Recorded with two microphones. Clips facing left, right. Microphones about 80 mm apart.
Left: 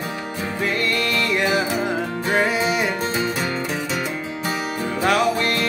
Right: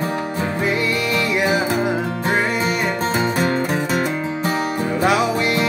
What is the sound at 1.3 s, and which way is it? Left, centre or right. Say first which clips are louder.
Music: right 2 dB; centre.